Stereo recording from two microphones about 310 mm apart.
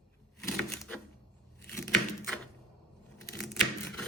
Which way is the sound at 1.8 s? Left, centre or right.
Centre.